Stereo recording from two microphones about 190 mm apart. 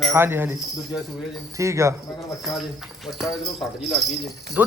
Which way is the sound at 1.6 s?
15° right (ahead or behind).